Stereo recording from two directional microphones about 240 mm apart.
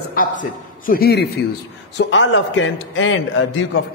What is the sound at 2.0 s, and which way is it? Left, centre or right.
A man's voice, left.